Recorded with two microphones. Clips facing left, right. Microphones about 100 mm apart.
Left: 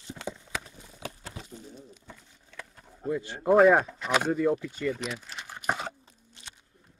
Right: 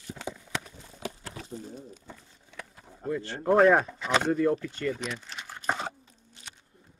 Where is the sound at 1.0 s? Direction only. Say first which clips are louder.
Right 2 dB; 20° right (ahead or behind).